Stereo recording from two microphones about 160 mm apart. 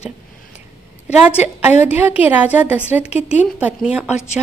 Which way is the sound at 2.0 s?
10° right (ahead or behind).